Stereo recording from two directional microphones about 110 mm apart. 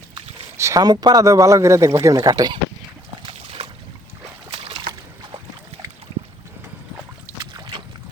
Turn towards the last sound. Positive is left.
turn(degrees=-45)  # may be behind; listen again after turning